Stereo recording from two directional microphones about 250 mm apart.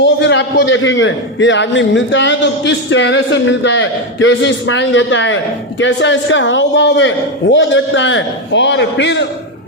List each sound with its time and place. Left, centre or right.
0.0 s a man's voice: left